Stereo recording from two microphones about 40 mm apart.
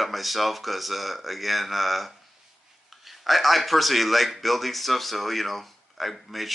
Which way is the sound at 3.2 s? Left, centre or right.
Centre.